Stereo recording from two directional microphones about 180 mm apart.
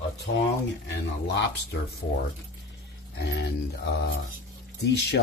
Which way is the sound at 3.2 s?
70° left (ahead or behind).